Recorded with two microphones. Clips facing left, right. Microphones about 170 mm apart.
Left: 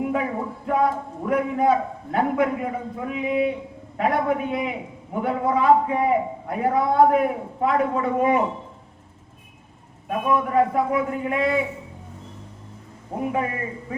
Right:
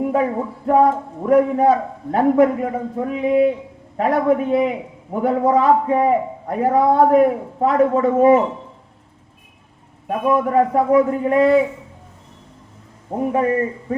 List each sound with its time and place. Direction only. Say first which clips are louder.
0.0 s a sound: right 6 dB; 40° right (ahead or behind)
0.7 s a man's voice: right 7 dB; 40° right (ahead or behind)
10.1 s a man's voice: right 4 dB; 40° right (ahead or behind)
13.2 s a man's voice: right 8 dB; 40° right (ahead or behind)